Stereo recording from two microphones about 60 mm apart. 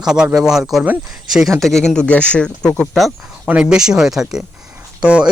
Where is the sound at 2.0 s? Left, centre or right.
Left.